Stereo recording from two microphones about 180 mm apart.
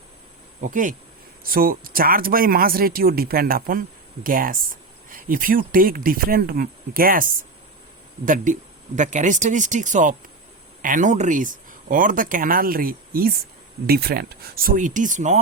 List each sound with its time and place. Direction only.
0.6 s speech: 45° right (ahead or behind)